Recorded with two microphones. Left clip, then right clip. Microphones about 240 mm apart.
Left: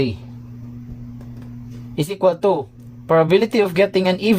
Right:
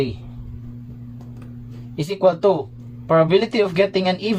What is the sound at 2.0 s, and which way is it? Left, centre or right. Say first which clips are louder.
Speech: even; left.